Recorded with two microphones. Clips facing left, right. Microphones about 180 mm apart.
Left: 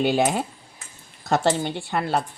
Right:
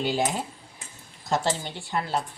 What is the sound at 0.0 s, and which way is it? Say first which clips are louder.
A woman's voice: left 5 dB; 65° left (ahead or behind).